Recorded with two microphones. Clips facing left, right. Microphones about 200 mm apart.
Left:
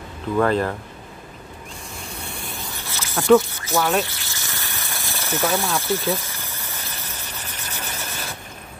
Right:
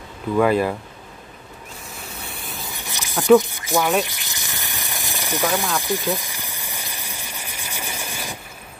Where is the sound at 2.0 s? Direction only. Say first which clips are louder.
Left 2 dB; centre (ahead or behind).